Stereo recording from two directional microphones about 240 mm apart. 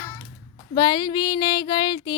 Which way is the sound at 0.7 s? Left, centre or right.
Centre.